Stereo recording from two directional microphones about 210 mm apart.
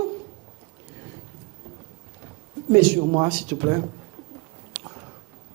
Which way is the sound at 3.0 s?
25° right (ahead or behind).